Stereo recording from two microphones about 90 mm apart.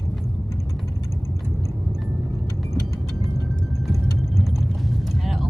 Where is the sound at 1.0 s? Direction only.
30° left (ahead or behind).